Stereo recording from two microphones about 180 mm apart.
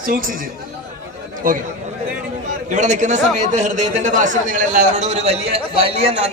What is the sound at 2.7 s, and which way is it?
A man's voice, 40° right (ahead or behind).